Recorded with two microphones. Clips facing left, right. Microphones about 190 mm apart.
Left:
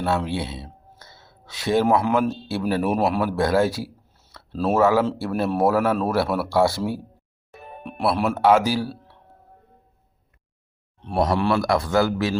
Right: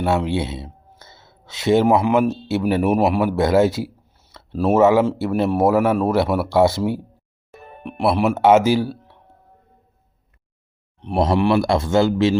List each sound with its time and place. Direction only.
0.0 s speech: 20° right (ahead or behind)
7.6 s music: 10° left (ahead or behind)
7.9 s a man's voice: 15° right (ahead or behind)
11.0 s a man's voice: 20° right (ahead or behind)